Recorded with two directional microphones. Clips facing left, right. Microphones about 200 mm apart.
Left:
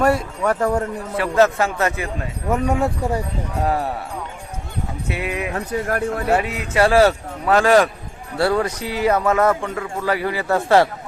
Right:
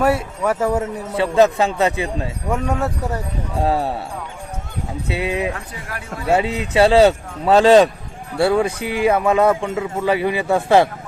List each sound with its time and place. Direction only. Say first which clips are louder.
0.0 s speech: even; 5° right (ahead or behind)
1.2 s speech: right 2 dB; 20° right (ahead or behind)
2.5 s speech: left 3 dB; 5° left (ahead or behind)
3.6 s speech: right 2 dB; 30° right (ahead or behind)
5.1 s speech: right 4 dB; 25° right (ahead or behind)
5.5 s speech: left 10 dB; 50° left (ahead or behind)
6.3 s speech: right 6 dB; 25° right (ahead or behind)